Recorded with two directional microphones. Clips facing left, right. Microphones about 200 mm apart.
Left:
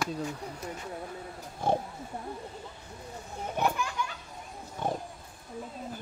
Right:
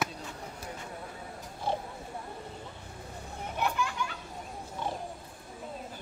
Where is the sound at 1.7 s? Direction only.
50° left (ahead or behind).